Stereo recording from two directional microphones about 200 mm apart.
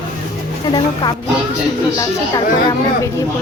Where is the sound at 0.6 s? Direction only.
20° left (ahead or behind).